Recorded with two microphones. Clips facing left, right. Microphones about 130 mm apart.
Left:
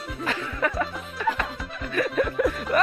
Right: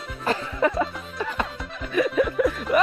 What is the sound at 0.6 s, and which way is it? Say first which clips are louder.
Music: right 4 dB; 20° right (ahead or behind).